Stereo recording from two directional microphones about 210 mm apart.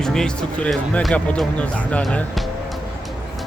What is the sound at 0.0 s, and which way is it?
Speech, 5° left (ahead or behind).